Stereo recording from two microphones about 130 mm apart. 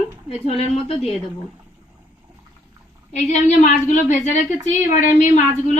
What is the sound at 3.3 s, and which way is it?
A woman's voice, 70° left (ahead or behind).